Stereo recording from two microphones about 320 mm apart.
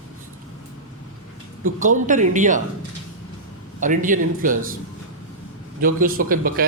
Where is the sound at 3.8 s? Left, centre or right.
Right.